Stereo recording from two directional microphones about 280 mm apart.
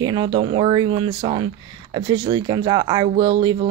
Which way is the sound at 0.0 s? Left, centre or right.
Centre.